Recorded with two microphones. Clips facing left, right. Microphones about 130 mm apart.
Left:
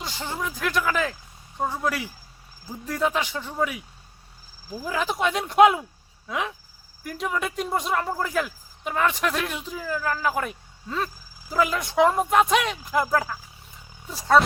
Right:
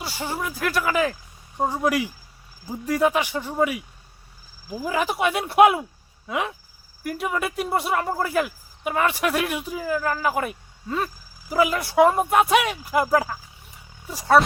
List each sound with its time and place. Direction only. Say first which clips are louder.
0.0 s speech: right 2 dB; 10° right (ahead or behind)